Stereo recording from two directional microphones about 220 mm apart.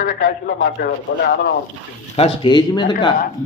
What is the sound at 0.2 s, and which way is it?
Speech, 55° left (ahead or behind).